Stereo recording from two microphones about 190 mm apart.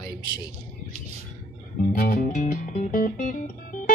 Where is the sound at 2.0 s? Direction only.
45° left (ahead or behind).